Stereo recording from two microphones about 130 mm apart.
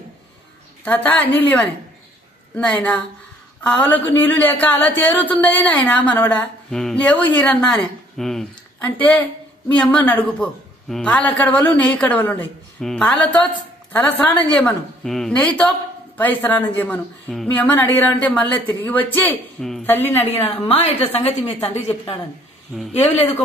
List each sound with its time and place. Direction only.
0.8 s speech: 10° left (ahead or behind)
17.3 s a sound: 5° left (ahead or behind)
17.6 s speech: 15° left (ahead or behind)
20.6 s a woman's voice: 50° left (ahead or behind)
22.9 s speech: 15° left (ahead or behind)